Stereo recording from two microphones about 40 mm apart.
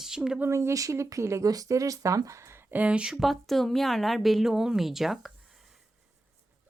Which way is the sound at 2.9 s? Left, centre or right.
Right.